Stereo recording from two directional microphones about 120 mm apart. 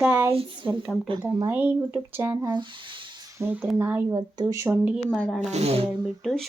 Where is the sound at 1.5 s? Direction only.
15° right (ahead or behind).